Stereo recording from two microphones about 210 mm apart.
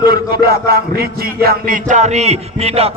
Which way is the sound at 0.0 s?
45° right (ahead or behind).